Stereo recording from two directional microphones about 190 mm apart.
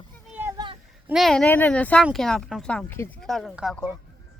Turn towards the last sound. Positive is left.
turn(degrees=0)  # may be behind; listen again after turning